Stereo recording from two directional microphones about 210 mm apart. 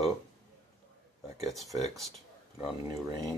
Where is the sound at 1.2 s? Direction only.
Centre (ahead or behind).